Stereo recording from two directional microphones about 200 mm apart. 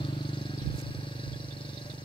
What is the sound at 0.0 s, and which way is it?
Vehicle, 25° left (ahead or behind).